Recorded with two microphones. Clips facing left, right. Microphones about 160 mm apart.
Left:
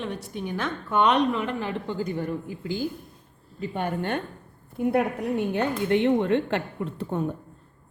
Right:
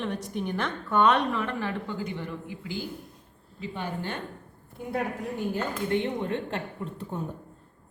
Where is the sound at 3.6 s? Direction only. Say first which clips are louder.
Left 5 dB; 55° left (ahead or behind).